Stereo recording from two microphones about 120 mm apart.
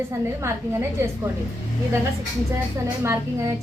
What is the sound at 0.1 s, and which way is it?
A woman's voice, 20° right (ahead or behind).